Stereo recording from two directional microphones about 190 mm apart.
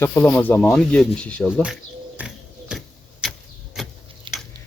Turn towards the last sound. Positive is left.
turn(degrees=-25)  # may be behind; listen again after turning